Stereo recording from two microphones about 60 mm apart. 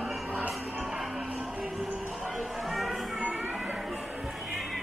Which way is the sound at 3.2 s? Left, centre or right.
Right.